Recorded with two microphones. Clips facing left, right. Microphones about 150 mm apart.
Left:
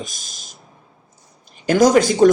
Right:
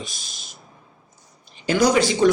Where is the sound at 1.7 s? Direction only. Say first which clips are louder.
Left 5 dB; 45° left (ahead or behind).